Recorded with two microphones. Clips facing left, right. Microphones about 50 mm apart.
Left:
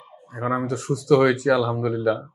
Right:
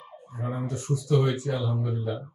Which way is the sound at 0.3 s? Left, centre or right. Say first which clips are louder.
Left 8 dB; left.